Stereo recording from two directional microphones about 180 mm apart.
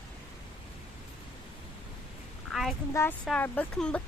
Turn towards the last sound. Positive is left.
turn(degrees=5)  # may be behind; listen again after turning